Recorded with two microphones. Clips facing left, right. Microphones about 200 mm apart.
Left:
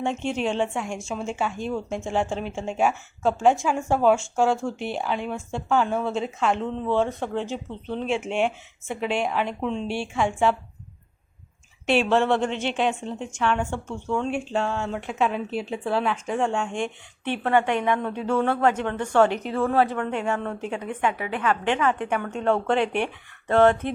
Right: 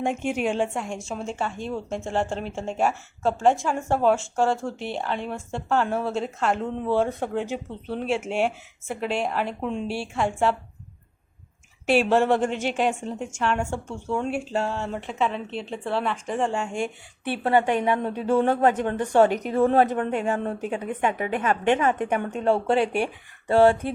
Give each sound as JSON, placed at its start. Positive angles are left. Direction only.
{"t": 0.0, "sound": "a woman's voice", "side_deg": -10}
{"t": 11.9, "sound": "a woman's voice", "side_deg": -10}
{"t": 17.2, "sound": "a woman's voice", "side_deg": -35}
{"t": 19.0, "sound": "speech", "side_deg": -15}
{"t": 20.5, "sound": "a woman's voice", "side_deg": -40}
{"t": 22.4, "sound": "speech", "side_deg": -10}
{"t": 22.7, "sound": "a woman's voice", "side_deg": -35}
{"t": 23.0, "sound": "speech", "side_deg": -10}